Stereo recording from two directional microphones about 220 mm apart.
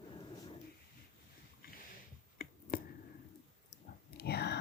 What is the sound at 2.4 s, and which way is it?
Finger snapping, 40° left (ahead or behind).